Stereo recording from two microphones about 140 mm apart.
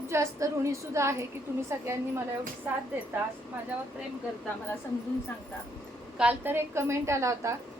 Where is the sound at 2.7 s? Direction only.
15° right (ahead or behind).